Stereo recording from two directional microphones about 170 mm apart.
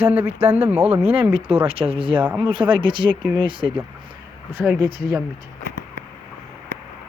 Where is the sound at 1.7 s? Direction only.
35° right (ahead or behind).